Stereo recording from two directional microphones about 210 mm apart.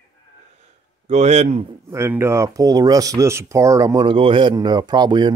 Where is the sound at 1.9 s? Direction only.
10° right (ahead or behind).